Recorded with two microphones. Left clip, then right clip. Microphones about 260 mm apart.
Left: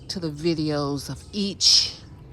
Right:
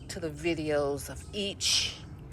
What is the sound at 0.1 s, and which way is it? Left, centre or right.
A woman's voice, left.